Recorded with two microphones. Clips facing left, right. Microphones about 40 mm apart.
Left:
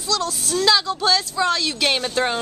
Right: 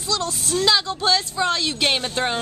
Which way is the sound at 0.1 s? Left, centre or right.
Right.